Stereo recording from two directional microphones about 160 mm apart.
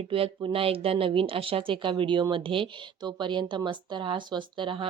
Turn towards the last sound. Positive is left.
turn(degrees=-30)  # may be behind; listen again after turning